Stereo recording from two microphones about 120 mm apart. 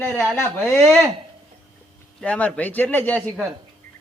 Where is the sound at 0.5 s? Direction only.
Centre (ahead or behind).